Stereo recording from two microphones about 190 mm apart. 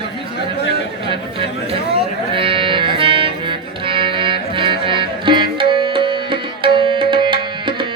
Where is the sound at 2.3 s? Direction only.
25° right (ahead or behind).